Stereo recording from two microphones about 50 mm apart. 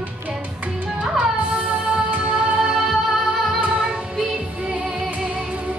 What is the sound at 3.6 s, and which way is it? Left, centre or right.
Music, right.